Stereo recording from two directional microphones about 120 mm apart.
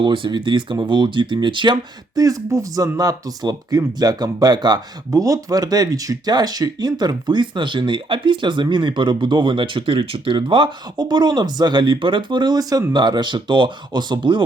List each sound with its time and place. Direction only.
0.0 s speech: 40° right (ahead or behind)